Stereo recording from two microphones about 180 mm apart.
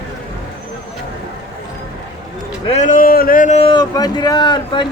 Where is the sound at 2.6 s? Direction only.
40° left (ahead or behind).